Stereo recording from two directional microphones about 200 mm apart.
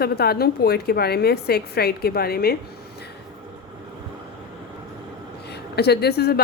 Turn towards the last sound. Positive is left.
turn(degrees=55)  # may be behind; listen again after turning